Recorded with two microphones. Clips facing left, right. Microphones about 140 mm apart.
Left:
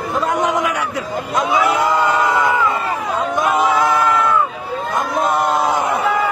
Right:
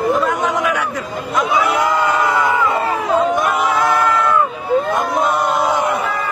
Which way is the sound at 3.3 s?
20° left (ahead or behind).